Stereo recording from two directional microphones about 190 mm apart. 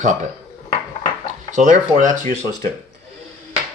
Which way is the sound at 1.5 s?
40° right (ahead or behind).